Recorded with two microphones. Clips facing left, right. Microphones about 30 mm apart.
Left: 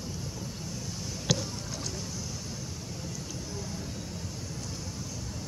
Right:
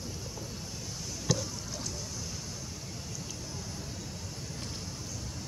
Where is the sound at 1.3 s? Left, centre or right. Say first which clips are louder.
Left 2 dB; left.